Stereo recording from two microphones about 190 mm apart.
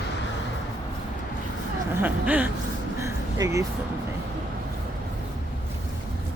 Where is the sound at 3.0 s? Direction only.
15° right (ahead or behind).